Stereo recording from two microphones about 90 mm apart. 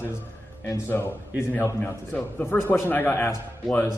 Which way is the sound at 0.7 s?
30° left (ahead or behind).